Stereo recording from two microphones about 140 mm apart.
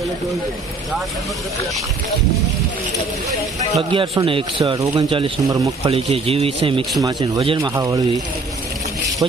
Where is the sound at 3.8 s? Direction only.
40° right (ahead or behind).